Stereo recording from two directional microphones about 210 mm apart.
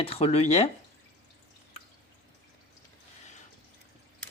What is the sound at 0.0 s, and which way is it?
Speech, 30° left (ahead or behind).